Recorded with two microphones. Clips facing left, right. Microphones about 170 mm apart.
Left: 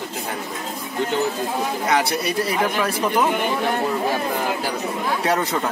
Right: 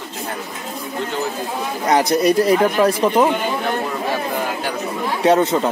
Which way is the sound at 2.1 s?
40° right (ahead or behind).